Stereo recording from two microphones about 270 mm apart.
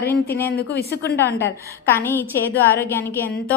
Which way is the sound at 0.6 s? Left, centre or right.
Left.